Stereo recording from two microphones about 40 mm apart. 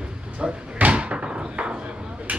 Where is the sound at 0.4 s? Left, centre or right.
Right.